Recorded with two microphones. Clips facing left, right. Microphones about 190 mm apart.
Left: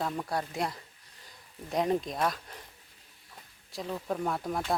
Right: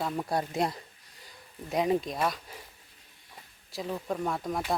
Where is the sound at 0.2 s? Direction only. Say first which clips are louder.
Right 3 dB; 20° right (ahead or behind).